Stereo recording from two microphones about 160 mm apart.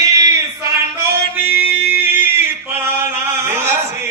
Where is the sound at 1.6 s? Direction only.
15° right (ahead or behind).